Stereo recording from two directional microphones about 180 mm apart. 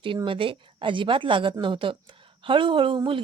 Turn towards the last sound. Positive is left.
turn(degrees=-30)  # may be behind; listen again after turning